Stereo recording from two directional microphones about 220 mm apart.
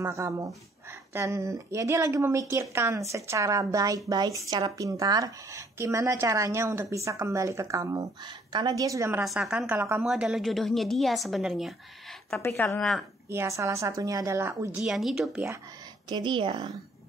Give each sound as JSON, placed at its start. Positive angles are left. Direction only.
{"t": 0.0, "sound": "speech", "side_deg": -15}
{"t": 9.2, "sound": "a woman's voice", "side_deg": 0}
{"t": 12.4, "sound": "speech", "side_deg": 10}
{"t": 13.3, "sound": "speech", "side_deg": -10}
{"t": 14.8, "sound": "a woman's voice", "side_deg": 0}
{"t": 16.1, "sound": "a woman's voice", "side_deg": -20}